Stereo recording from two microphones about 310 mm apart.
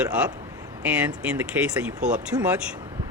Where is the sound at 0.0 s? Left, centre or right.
Centre.